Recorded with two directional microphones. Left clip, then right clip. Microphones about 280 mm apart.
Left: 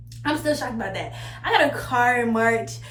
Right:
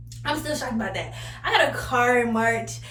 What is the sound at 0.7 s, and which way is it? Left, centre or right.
Speech, centre.